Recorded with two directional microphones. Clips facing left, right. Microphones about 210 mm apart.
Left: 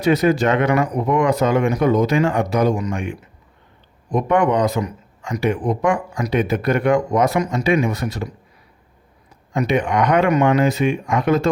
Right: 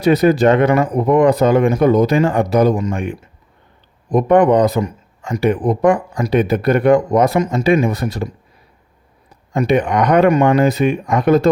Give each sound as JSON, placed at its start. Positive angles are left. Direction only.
{"t": 0.0, "sound": "speech", "side_deg": -35}
{"t": 9.5, "sound": "speech", "side_deg": -35}